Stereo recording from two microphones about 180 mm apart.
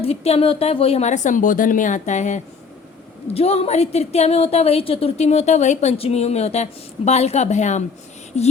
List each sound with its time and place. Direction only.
0.0 s a woman's voice: 35° left (ahead or behind)